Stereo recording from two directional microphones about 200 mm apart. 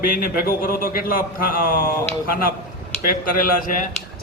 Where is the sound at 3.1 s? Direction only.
40° left (ahead or behind).